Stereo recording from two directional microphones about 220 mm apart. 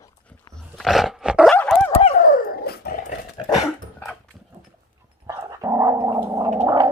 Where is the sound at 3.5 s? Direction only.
Centre (ahead or behind).